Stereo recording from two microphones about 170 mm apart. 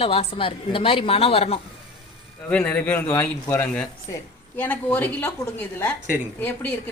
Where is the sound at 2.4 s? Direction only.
10° left (ahead or behind).